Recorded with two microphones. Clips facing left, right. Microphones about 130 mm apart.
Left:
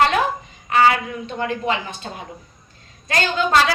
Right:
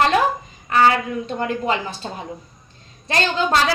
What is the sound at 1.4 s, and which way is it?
Speech, 35° right (ahead or behind).